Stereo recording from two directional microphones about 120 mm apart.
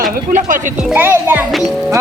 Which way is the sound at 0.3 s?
90° right.